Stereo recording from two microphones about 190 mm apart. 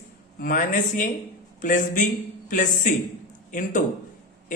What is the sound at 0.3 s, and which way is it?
Speech, 45° left (ahead or behind).